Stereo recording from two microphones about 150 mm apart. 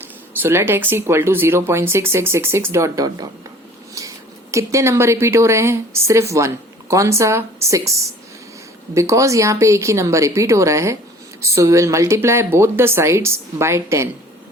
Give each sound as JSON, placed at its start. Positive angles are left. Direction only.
{"t": 0.4, "sound": "speech", "side_deg": -15}
{"t": 4.0, "sound": "a sound", "side_deg": -20}
{"t": 4.5, "sound": "speech", "side_deg": -20}